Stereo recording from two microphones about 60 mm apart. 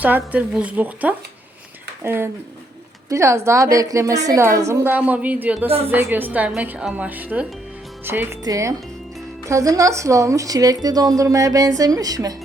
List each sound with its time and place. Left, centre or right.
0.0 s speech: right
2.0 s a woman's voice: right
3.1 s speech: right
4.4 s a woman's voice: right
4.8 s a woman's voice: right
8.4 s a woman's voice: right